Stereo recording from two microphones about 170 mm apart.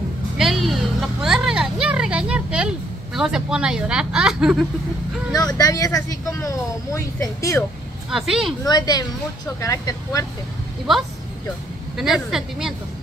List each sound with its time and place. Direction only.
0.4 s a sound: centre (ahead or behind)
3.2 s speech: 5° right (ahead or behind)
5.3 s speech: 20° left (ahead or behind)
8.1 s speech: centre (ahead or behind)
8.6 s speech: 25° left (ahead or behind)
12.0 s speech: 5° right (ahead or behind)